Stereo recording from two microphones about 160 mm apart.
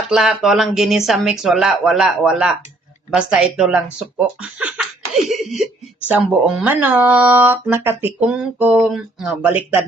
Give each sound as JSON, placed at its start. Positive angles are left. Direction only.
{"t": 0.1, "sound": "speech", "side_deg": -5}
{"t": 5.1, "sound": "speech", "side_deg": 0}